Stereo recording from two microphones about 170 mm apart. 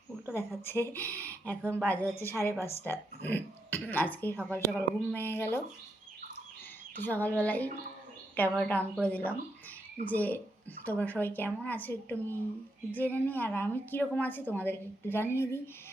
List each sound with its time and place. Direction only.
0.3 s a woman's voice: 15° left (ahead or behind)
6.9 s a woman's voice: 10° left (ahead or behind)